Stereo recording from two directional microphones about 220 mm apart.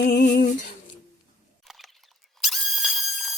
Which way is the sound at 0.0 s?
45° left (ahead or behind).